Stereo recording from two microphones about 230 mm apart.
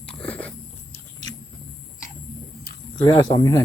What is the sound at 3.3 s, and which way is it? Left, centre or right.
Speech, centre.